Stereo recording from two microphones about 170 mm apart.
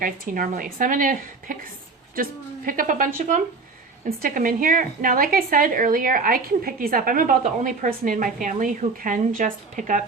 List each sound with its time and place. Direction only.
0.0 s a woman's voice: 55° right (ahead or behind)
2.6 s a woman's voice: 55° right (ahead or behind)